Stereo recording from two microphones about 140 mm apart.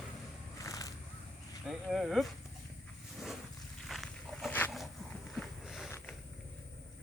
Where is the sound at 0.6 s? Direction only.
25° left (ahead or behind).